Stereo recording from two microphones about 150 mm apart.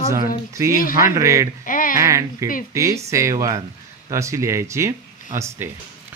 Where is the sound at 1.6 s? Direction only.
65° left (ahead or behind).